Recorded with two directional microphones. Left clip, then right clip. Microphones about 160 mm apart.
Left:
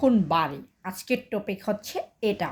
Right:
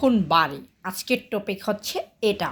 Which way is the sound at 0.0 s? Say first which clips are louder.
Right 3 dB; 15° left (ahead or behind).